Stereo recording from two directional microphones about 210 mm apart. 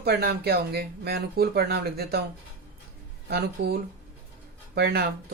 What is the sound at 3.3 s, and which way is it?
Speech, 50° right (ahead or behind).